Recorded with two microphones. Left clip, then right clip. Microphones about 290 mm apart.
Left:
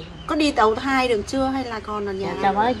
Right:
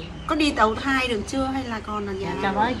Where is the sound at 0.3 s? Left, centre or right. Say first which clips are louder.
Left 2 dB; left.